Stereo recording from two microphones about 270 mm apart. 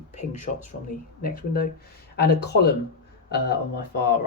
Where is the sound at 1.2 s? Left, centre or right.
Left.